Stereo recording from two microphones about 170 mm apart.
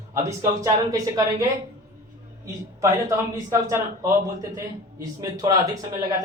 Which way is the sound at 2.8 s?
20° right (ahead or behind).